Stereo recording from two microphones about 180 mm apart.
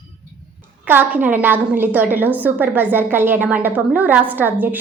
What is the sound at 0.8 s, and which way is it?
A woman's voice, 10° right (ahead or behind).